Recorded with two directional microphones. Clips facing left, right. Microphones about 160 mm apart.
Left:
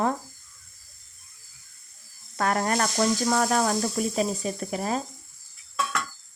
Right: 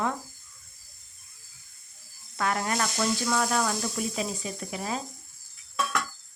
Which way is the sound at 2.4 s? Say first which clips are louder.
Left 4 dB; 45° left (ahead or behind).